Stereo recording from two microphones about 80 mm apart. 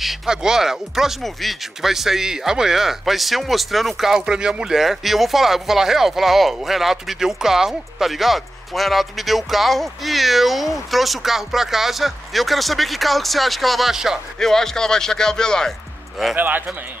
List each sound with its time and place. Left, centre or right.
0.0 s speech: centre
16.3 s speech: right